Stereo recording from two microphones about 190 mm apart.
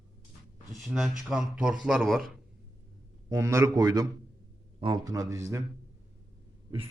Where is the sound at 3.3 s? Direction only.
15° right (ahead or behind).